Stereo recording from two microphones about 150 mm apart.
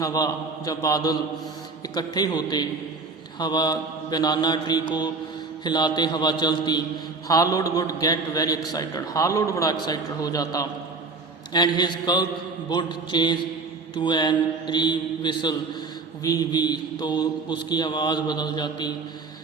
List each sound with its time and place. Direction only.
0.0 s a man's voice: 25° left (ahead or behind)